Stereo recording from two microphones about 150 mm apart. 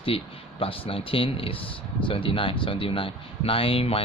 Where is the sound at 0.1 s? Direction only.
40° left (ahead or behind).